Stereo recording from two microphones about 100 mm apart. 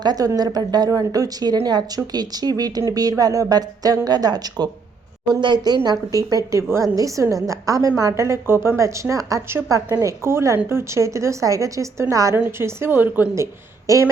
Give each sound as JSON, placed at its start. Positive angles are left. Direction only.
{"t": 0.0, "sound": "a woman's voice", "side_deg": -40}